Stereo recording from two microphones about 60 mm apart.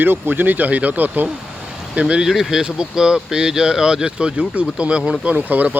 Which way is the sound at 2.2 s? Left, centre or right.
Centre.